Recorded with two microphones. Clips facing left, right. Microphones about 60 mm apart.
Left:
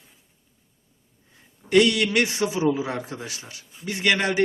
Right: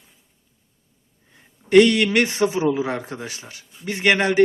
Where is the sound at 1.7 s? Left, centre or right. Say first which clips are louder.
Right 5 dB; right.